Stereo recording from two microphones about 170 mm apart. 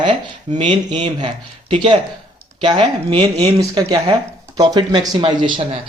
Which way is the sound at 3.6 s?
25° right (ahead or behind).